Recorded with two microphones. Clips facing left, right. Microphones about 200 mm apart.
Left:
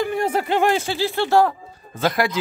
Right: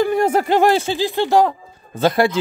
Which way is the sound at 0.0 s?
40° right (ahead or behind).